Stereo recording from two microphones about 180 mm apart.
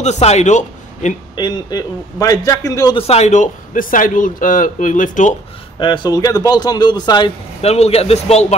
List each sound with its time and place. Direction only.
0.0 s a man's voice: 40° left (ahead or behind)
1.3 s a man's voice: 25° left (ahead or behind)
3.0 s speech: 35° left (ahead or behind)
5.8 s a man's voice: 25° left (ahead or behind)
7.6 s speech: 35° left (ahead or behind)